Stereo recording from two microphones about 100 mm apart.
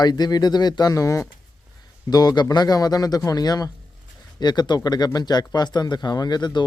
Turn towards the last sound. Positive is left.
turn(degrees=45)  # may be behind; listen again after turning